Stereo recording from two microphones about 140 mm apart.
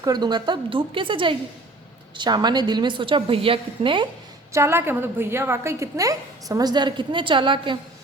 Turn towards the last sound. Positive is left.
turn(degrees=-35)  # may be behind; listen again after turning